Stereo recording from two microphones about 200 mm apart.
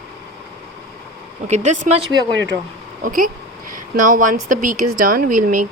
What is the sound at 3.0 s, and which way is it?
Speech, 45° right (ahead or behind).